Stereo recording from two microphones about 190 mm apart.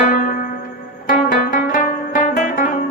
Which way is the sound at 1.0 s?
45° left (ahead or behind).